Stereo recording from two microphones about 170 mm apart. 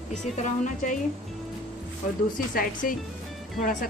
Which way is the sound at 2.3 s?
55° left (ahead or behind).